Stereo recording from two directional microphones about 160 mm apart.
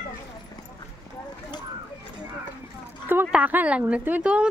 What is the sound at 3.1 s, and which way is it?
Speech, 10° right (ahead or behind).